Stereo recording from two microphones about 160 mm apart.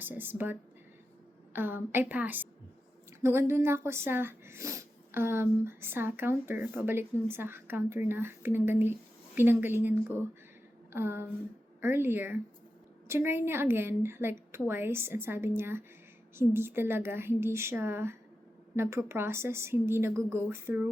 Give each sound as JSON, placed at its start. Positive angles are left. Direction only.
{"t": 0.0, "sound": "speech", "side_deg": -10}
{"t": 1.5, "sound": "speech", "side_deg": -15}
{"t": 10.9, "sound": "speech", "side_deg": -15}